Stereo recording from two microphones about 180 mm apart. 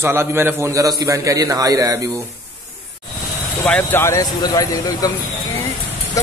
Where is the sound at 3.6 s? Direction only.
10° left (ahead or behind).